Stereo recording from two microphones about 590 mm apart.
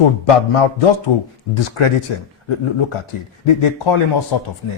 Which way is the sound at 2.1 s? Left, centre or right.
Left.